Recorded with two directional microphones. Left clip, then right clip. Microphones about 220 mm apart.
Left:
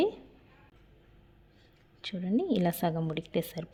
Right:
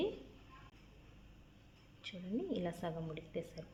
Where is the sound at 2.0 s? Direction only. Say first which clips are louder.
Left 11 dB; 45° left (ahead or behind).